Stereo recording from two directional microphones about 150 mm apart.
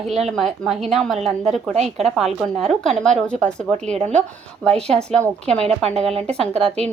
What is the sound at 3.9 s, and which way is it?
Speech, 50° right (ahead or behind).